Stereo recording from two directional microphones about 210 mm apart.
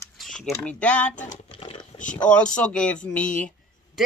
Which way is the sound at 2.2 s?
5° left (ahead or behind).